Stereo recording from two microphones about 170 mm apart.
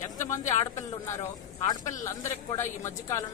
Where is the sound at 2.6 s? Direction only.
15° left (ahead or behind).